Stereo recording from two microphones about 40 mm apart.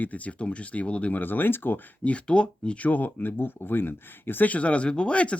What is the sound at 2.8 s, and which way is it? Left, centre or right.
Speech, left.